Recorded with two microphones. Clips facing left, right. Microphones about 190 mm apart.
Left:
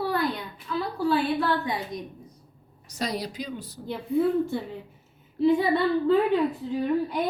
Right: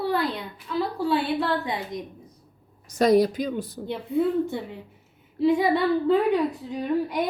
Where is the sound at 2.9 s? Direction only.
50° right (ahead or behind).